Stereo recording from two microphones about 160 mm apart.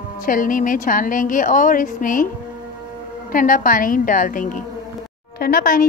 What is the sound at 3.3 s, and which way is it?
A woman's voice, 60° left (ahead or behind).